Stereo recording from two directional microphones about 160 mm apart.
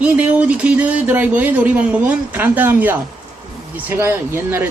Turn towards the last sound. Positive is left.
turn(degrees=-15)  # may be behind; listen again after turning